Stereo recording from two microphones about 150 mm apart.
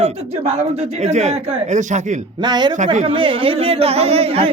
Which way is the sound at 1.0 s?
50° right (ahead or behind).